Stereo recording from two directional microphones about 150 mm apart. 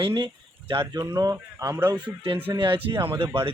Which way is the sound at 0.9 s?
25° right (ahead or behind).